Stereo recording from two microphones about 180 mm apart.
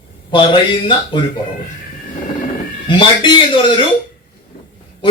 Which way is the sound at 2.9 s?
25° left (ahead or behind).